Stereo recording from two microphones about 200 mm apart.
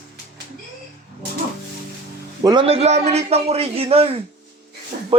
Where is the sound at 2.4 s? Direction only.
25° right (ahead or behind).